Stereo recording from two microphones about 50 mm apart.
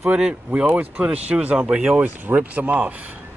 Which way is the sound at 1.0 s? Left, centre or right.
Right.